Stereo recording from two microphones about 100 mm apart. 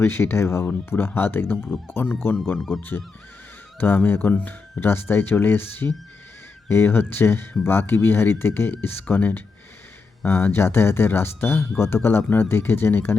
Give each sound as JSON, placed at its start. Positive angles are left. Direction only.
{"t": 0.0, "sound": "speech", "side_deg": 20}
{"t": 3.8, "sound": "speech", "side_deg": 20}